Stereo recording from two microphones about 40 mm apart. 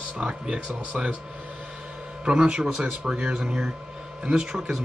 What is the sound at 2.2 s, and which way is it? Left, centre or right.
Speech, right.